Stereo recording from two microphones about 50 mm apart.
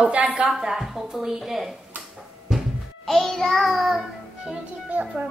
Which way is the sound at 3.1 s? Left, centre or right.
Centre.